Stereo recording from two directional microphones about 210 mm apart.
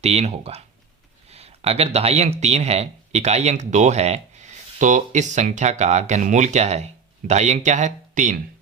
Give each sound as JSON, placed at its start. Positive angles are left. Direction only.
{"t": 0.0, "sound": "speech", "side_deg": -30}